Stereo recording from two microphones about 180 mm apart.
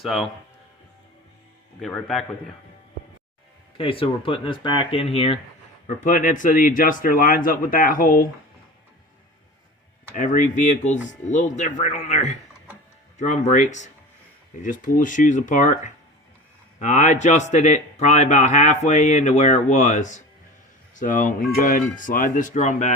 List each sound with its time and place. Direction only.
0.0 s a man's voice: centre (ahead or behind)
1.8 s a man's voice: centre (ahead or behind)
3.8 s speech: 30° left (ahead or behind)
5.9 s speech: 45° left (ahead or behind)
10.2 s speech: 45° left (ahead or behind)